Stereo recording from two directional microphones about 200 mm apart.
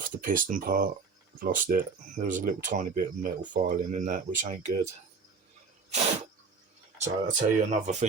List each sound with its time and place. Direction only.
0.0 s speech: 40° right (ahead or behind)
7.0 s speech: 35° right (ahead or behind)